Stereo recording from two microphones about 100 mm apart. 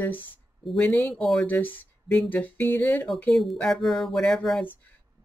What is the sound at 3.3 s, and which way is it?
Speech, centre (ahead or behind).